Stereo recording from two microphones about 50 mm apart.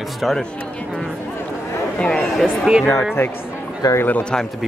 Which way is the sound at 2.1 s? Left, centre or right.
Centre.